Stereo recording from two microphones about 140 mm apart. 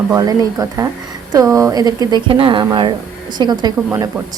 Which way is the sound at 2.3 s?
40° right (ahead or behind).